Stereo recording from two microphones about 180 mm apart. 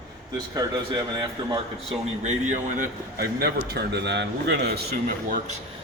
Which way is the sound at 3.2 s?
65° right (ahead or behind).